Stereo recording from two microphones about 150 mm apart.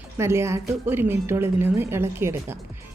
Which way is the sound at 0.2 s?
15° right (ahead or behind).